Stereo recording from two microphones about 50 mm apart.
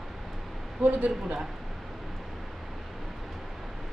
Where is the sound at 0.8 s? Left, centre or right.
Right.